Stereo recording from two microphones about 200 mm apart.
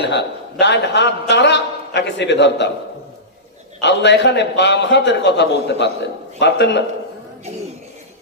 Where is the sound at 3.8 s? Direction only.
60° left (ahead or behind).